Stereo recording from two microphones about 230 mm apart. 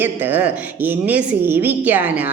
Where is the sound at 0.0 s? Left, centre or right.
Centre.